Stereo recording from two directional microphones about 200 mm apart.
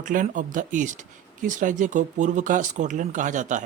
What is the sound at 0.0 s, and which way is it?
Speech, 40° right (ahead or behind).